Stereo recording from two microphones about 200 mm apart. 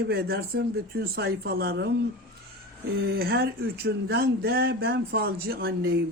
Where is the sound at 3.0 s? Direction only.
50° right (ahead or behind).